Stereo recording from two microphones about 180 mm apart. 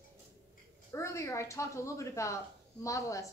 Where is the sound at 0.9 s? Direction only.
15° left (ahead or behind).